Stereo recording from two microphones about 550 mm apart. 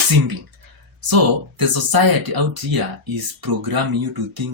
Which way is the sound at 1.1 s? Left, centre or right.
Right.